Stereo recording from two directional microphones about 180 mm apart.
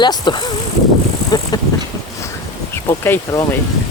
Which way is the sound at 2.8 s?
15° left (ahead or behind).